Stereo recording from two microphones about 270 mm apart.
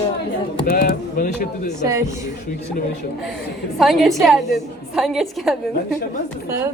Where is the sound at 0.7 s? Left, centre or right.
Left.